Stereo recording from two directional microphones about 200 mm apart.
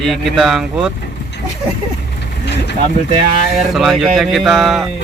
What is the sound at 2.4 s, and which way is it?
Vehicle, 60° left (ahead or behind).